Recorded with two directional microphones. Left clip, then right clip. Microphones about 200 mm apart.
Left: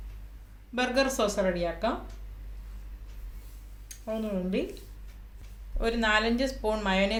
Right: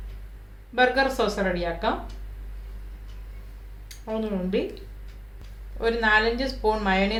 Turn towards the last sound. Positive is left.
turn(degrees=40)  # may be behind; listen again after turning